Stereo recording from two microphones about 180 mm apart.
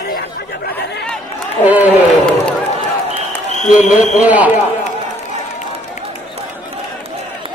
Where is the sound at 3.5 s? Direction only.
45° left (ahead or behind).